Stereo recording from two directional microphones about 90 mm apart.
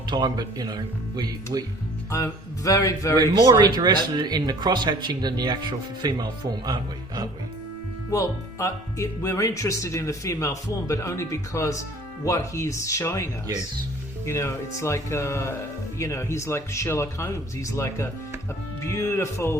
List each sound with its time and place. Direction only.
0.1 s speech: 50° right (ahead or behind)
2.0 s speech: 35° left (ahead or behind)
3.2 s speech: 50° right (ahead or behind)
8.1 s speech: 35° left (ahead or behind)
14.3 s speech: 30° left (ahead or behind)